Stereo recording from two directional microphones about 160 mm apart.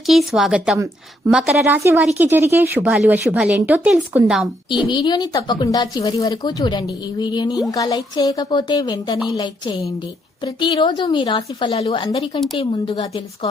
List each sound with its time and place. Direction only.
0.0 s a woman's voice: centre (ahead or behind)
1.6 s a woman's voice: 15° right (ahead or behind)
4.9 s a woman's voice: 25° left (ahead or behind)